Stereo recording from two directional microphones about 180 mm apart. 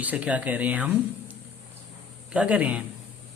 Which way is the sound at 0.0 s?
10° right (ahead or behind).